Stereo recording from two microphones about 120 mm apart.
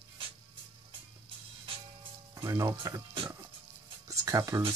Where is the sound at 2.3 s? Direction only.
30° right (ahead or behind).